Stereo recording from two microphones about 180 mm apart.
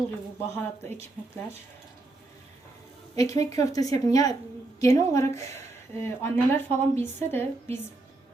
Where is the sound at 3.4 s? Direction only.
20° left (ahead or behind).